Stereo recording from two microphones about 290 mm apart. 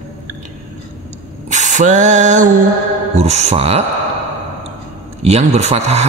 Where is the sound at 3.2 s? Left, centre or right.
Right.